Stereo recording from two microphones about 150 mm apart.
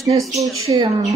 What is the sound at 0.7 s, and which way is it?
Speech, 25° right (ahead or behind).